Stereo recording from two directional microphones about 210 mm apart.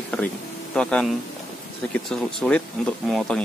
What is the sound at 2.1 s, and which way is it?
Speech, 5° left (ahead or behind).